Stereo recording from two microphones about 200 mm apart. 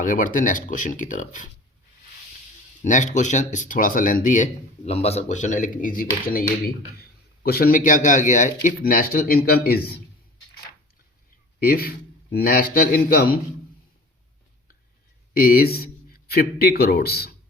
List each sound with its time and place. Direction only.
0.0 s speech: 40° left (ahead or behind)
2.8 s speech: 40° left (ahead or behind)
4.9 s speech: 30° left (ahead or behind); by 6.4 s 45° left (ahead or behind)
7.4 s speech: 50° left (ahead or behind)
11.6 s speech: 50° left (ahead or behind)
15.3 s speech: 45° left (ahead or behind)